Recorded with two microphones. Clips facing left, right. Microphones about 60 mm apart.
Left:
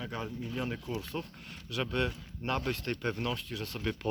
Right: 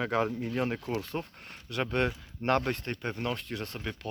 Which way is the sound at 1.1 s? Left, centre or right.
Right.